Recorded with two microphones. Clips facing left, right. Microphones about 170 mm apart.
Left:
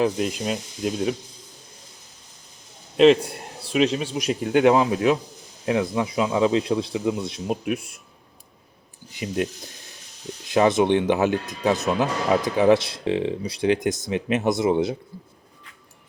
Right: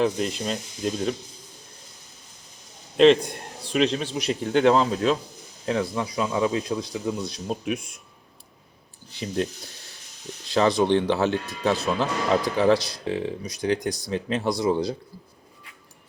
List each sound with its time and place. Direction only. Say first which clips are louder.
0.0 s speech: left 1 dB; 5° left (ahead or behind)
3.0 s a man's voice: left 1 dB; 5° left (ahead or behind)
7.6 s speech: left 2 dB; 5° left (ahead or behind)
9.1 s a man's voice: left 1 dB; 10° left (ahead or behind)
10.5 s speech: left 2 dB; 20° left (ahead or behind)